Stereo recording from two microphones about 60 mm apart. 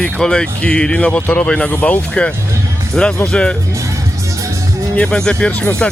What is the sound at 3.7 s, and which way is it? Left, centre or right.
Music, right.